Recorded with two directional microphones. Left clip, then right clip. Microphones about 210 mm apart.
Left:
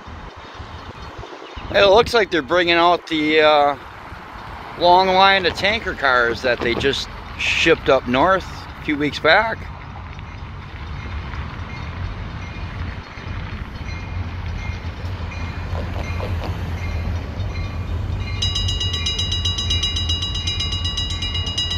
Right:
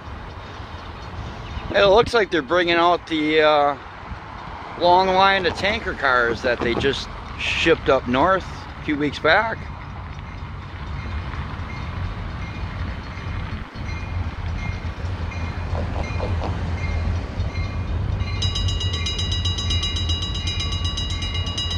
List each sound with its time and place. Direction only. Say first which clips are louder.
1.7 s speech: left 2 dB; 15° left (ahead or behind)
4.8 s speech: left 3 dB; 10° left (ahead or behind)
15.7 s boat: right 1 dB; 35° right (ahead or behind)
18.4 s train: left 5 dB; 40° right (ahead or behind)